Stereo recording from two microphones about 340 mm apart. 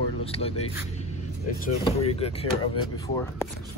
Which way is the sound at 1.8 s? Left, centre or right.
Centre.